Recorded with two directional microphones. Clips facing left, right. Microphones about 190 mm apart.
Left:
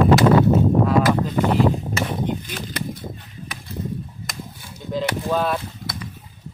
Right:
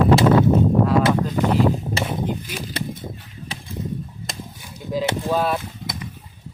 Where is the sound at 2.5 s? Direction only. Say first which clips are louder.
Right 1 dB; 10° right (ahead or behind).